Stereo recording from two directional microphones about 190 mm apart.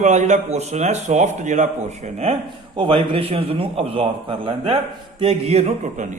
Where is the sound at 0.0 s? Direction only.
40° right (ahead or behind).